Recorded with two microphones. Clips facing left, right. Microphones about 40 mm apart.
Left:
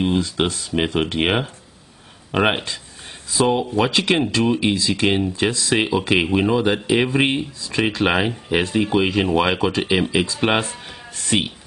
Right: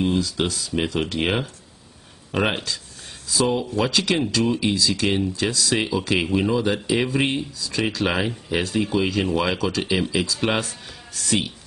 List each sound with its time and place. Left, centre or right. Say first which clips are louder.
0.0 s speech: left 2 dB; left